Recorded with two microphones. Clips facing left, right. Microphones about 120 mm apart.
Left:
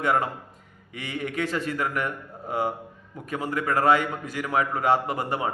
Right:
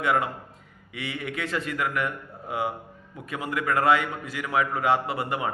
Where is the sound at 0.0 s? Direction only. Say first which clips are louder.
Left 1 dB; 40° left (ahead or behind).